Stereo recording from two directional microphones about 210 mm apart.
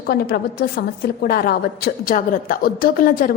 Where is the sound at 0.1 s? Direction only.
50° left (ahead or behind).